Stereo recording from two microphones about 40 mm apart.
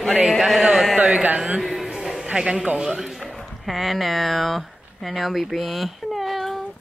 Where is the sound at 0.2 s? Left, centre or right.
Centre.